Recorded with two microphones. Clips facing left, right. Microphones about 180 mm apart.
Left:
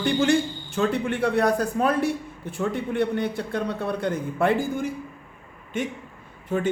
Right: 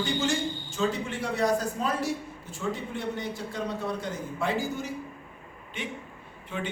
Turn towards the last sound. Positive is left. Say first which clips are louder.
# left 9 dB
turn(degrees=45)  # may be behind; listen again after turning